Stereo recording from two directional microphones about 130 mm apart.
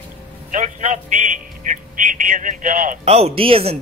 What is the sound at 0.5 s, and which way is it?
A man's voice, 75° right (ahead or behind).